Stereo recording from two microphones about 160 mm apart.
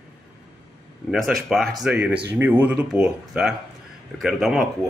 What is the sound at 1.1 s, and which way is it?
Speech, centre (ahead or behind).